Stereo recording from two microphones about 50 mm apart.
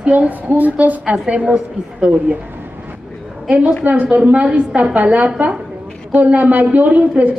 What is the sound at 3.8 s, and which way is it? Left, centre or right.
A woman's voice, right.